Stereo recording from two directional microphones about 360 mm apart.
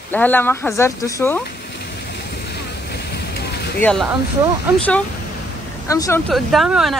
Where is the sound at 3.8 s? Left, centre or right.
Centre.